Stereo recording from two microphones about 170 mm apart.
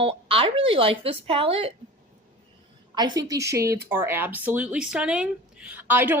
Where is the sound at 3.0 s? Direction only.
20° right (ahead or behind).